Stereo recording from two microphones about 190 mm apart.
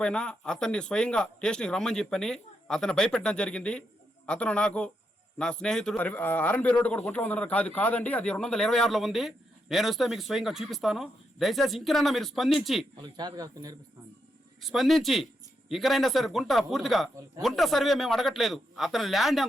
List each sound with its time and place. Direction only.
0.0 s a man's voice: 5° left (ahead or behind)
13.0 s a man's voice: 20° right (ahead or behind)
14.6 s a man's voice: centre (ahead or behind)